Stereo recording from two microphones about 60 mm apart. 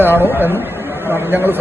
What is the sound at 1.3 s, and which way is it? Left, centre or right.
Speech, right.